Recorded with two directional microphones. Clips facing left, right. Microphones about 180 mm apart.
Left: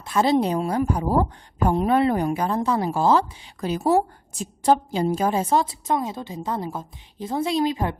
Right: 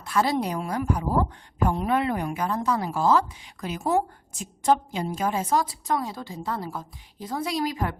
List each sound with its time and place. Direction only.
0.0 s a woman's voice: 25° left (ahead or behind)